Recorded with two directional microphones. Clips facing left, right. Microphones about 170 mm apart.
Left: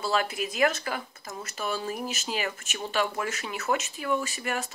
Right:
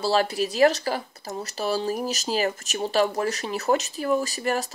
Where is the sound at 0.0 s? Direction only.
35° right (ahead or behind).